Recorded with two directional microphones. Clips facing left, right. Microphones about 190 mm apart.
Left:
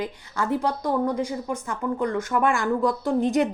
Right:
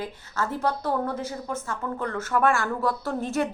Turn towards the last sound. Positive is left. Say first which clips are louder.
# left 5 dB
turn(degrees=15)  # may be behind; listen again after turning